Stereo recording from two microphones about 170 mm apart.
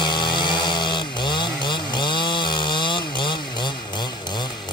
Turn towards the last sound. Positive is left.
turn(degrees=25)  # may be behind; listen again after turning